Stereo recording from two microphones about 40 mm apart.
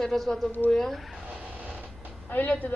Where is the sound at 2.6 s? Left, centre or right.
Left.